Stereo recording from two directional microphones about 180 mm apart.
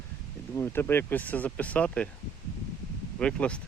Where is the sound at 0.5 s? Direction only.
10° left (ahead or behind).